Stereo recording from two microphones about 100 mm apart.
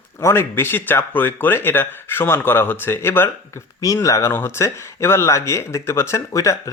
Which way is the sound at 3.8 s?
35° left (ahead or behind).